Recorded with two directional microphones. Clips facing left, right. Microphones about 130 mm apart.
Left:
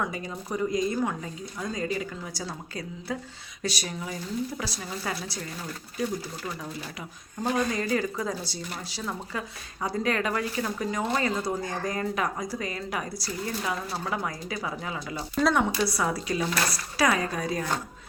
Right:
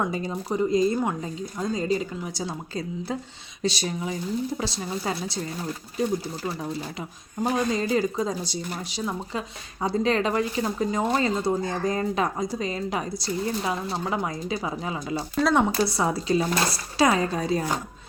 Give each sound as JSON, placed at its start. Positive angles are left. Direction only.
{"t": 0.0, "sound": "speech", "side_deg": -30}